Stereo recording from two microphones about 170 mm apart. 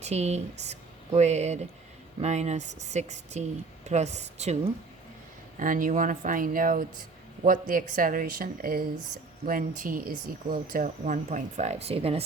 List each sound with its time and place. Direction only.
0.0 s speech: 40° right (ahead or behind)
5.5 s speech: 50° right (ahead or behind); by 12.2 s 35° right (ahead or behind)